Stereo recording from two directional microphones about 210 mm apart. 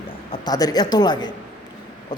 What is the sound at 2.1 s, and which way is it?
Vehicle, 20° left (ahead or behind).